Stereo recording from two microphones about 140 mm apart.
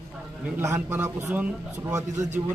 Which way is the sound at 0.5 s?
15° right (ahead or behind).